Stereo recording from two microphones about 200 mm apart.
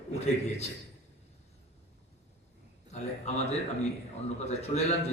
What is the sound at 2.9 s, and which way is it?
A man's voice, 35° left (ahead or behind).